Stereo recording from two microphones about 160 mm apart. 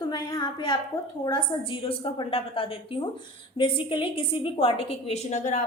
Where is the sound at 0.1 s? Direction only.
25° left (ahead or behind).